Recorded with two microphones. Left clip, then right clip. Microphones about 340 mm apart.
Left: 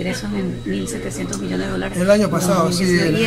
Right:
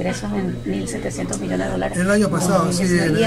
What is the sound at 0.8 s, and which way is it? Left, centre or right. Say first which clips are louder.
Speech: even; right.